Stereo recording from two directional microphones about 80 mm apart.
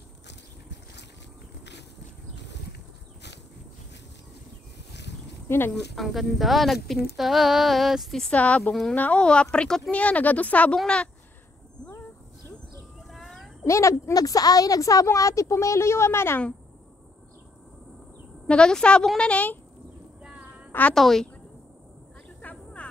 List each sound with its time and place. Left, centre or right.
5.7 s speech: centre
8.3 s a woman's voice: centre
13.1 s a sound: centre
13.7 s a woman's voice: left
14.1 s a woman's voice: left
18.5 s speech: centre
20.2 s a sound: centre
20.9 s speech: centre
22.4 s vehicle: centre